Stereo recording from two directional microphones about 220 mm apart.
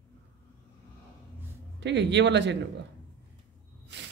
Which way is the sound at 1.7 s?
55° right (ahead or behind).